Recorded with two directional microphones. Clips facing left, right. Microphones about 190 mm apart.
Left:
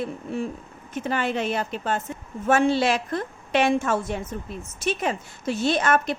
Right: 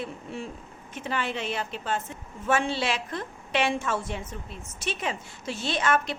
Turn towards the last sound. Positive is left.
turn(degrees=45)  # may be behind; listen again after turning